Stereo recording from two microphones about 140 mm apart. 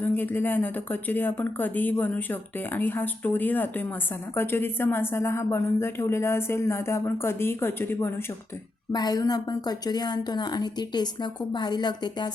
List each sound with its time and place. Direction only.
0.0 s speech: 15° left (ahead or behind)
8.9 s a woman's voice: 30° left (ahead or behind)